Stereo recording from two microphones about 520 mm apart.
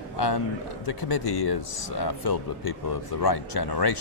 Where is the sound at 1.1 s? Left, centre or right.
Left.